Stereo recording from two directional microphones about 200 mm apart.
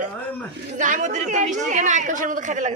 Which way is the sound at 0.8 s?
35° right (ahead or behind).